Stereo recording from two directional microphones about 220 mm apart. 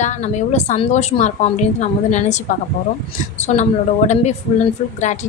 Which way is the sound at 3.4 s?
30° left (ahead or behind).